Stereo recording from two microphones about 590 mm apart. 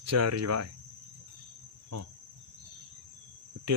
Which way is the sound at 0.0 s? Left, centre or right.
Right.